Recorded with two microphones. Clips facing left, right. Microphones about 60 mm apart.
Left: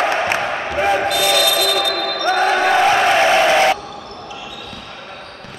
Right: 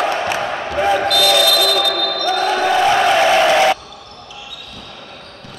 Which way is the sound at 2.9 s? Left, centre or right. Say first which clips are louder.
Right 1 dB; centre.